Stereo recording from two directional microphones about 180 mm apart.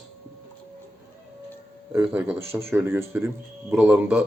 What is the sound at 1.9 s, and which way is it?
Speech, 10° right (ahead or behind).